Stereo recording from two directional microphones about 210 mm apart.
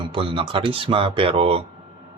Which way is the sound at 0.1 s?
25° right (ahead or behind).